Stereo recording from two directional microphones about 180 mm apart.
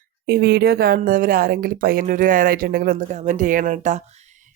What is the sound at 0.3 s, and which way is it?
Speech, 60° right (ahead or behind).